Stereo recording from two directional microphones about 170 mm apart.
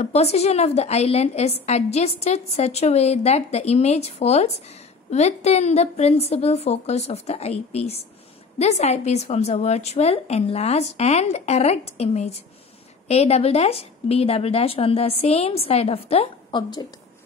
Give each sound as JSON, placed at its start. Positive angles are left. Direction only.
{"t": 0.0, "sound": "a woman's voice", "side_deg": 40}